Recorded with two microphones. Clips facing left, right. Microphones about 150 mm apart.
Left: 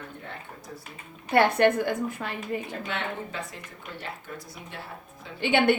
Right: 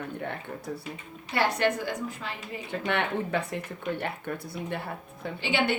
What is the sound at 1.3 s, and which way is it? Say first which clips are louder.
A woman's voice: left 5 dB; 55° left (ahead or behind).